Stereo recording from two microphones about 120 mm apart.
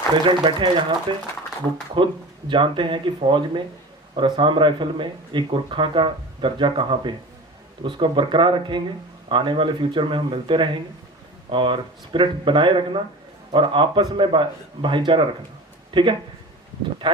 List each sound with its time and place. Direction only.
0.1 s speech: 40° right (ahead or behind)
2.0 s speech: 40° right (ahead or behind)